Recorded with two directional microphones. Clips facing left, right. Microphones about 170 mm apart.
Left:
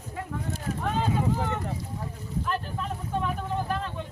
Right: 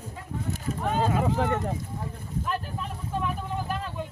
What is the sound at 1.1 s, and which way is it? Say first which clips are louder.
Speech: right 2 dB; 80° right.